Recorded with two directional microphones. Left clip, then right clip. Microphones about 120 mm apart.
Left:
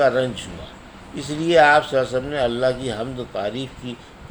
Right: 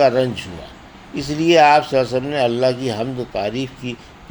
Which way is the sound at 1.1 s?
35° right (ahead or behind).